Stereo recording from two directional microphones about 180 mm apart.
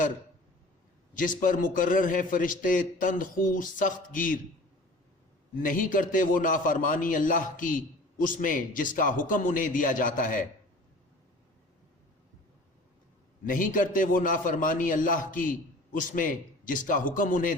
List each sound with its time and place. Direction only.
1.1 s a man's voice: 50° left (ahead or behind)
5.6 s a man's voice: 50° left (ahead or behind)
13.4 s a man's voice: 50° left (ahead or behind)